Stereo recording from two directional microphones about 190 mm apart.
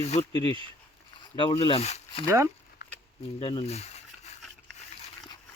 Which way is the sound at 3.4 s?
30° left (ahead or behind).